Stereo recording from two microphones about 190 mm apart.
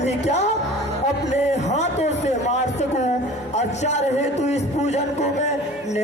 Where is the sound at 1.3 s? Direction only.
35° left (ahead or behind).